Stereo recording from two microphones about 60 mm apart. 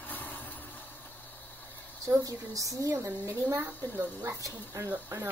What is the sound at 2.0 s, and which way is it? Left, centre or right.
Speech, right.